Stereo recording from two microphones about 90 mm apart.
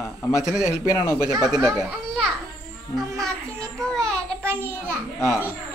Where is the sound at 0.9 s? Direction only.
30° left (ahead or behind).